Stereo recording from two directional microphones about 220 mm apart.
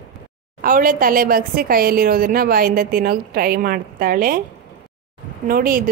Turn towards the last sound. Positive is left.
turn(degrees=-40)  # may be behind; listen again after turning